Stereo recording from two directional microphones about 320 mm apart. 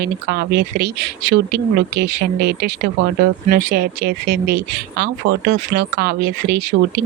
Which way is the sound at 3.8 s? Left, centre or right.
Right.